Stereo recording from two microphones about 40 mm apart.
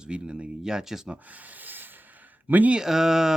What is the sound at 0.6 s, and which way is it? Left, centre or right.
Speech, centre.